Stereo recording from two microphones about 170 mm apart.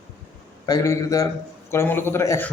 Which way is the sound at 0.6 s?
20° left (ahead or behind).